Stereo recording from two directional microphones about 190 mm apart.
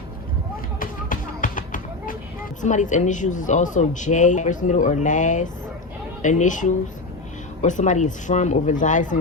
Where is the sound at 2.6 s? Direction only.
40° left (ahead or behind).